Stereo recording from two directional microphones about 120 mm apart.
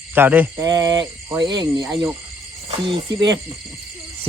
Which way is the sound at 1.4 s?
40° right (ahead or behind).